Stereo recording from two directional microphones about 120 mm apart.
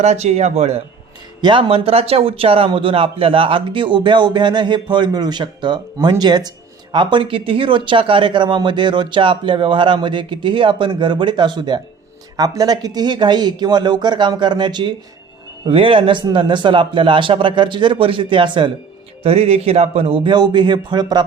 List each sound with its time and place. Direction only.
0.0 s speech: 65° right (ahead or behind)
1.4 s speech: 40° right (ahead or behind)
19.2 s speech: 55° right (ahead or behind)
20.3 s speech: 40° right (ahead or behind)